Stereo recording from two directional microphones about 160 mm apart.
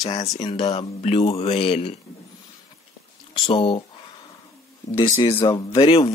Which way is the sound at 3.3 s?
30° left (ahead or behind).